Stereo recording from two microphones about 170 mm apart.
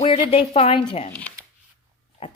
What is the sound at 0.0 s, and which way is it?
Speech, 35° left (ahead or behind).